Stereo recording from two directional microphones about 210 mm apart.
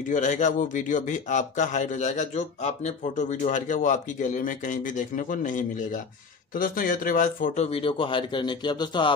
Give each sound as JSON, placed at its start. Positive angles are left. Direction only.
{"t": 0.1, "sound": "a man's voice", "side_deg": 35}